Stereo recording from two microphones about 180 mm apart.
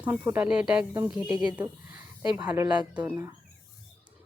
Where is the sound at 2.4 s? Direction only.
10° right (ahead or behind).